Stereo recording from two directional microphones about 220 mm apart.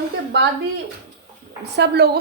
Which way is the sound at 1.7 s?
50° right (ahead or behind).